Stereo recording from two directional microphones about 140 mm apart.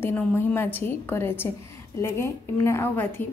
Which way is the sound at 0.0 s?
15° left (ahead or behind).